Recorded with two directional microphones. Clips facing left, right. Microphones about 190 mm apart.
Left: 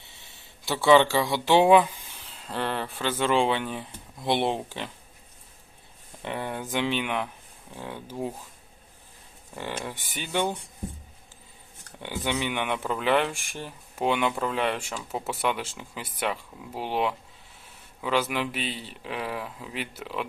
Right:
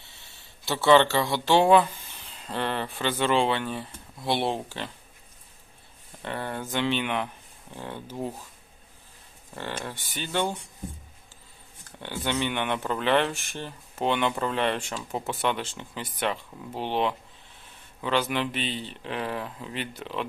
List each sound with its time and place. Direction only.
0.0 s a sound: 15° left (ahead or behind)
0.8 s speech: 15° left (ahead or behind)
6.2 s speech: 10° left (ahead or behind)
9.6 s speech: 10° left (ahead or behind)
11.9 s speech: 15° left (ahead or behind)